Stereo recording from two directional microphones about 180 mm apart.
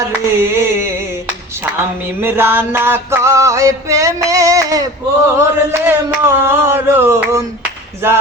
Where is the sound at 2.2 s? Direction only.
10° right (ahead or behind).